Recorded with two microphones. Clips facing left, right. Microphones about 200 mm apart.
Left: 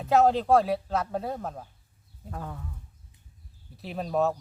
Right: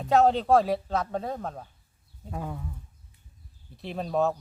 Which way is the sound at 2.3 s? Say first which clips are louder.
Right 3 dB; 10° right (ahead or behind).